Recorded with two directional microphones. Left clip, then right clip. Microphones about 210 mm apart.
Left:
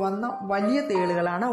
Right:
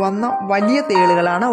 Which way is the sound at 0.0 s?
25° right (ahead or behind).